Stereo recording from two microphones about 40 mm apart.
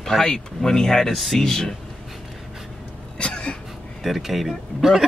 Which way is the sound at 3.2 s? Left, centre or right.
Left.